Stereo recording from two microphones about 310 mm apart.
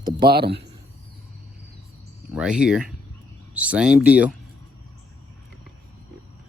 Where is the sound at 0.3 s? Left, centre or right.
Right.